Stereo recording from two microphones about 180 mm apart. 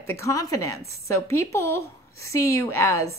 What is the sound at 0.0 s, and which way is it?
A woman's voice, 15° left (ahead or behind).